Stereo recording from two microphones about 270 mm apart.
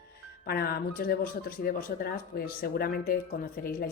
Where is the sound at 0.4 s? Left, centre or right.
Left.